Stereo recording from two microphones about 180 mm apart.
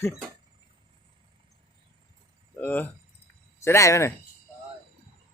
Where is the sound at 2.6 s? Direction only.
10° left (ahead or behind).